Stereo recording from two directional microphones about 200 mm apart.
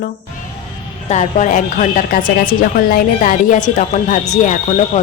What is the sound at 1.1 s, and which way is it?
A woman's voice, 35° left (ahead or behind).